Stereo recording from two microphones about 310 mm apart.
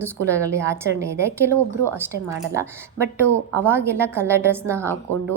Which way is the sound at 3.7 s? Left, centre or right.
Centre.